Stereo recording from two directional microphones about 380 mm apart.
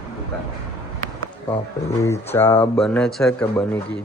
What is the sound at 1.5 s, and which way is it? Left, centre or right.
Speech, centre.